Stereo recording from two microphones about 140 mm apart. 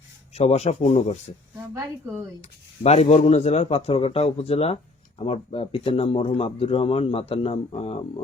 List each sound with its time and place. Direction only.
0.3 s a man's voice: 50° left (ahead or behind)
2.4 s a man's voice: 50° left (ahead or behind)